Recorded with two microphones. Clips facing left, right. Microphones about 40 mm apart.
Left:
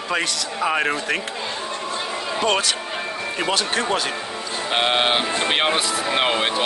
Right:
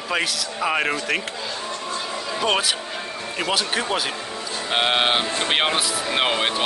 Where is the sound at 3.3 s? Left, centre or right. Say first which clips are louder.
Left 1 dB; centre.